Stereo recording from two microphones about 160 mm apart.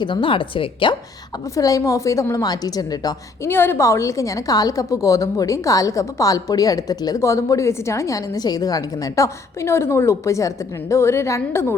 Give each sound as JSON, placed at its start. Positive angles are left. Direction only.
{"t": 0.0, "sound": "a woman's voice", "side_deg": 30}
{"t": 1.5, "sound": "a woman's voice", "side_deg": 20}